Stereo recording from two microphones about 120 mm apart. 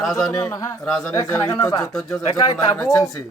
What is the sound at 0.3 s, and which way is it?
Speech, 30° left (ahead or behind).